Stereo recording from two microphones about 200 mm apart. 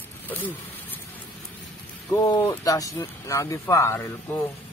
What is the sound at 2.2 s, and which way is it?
Speech, 20° left (ahead or behind).